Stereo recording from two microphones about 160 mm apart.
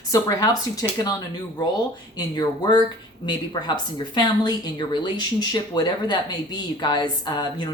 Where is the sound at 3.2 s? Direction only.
25° left (ahead or behind).